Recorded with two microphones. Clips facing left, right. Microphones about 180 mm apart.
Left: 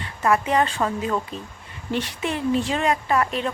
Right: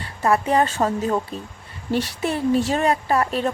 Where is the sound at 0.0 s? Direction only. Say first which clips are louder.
Right 1 dB; 35° right (ahead or behind).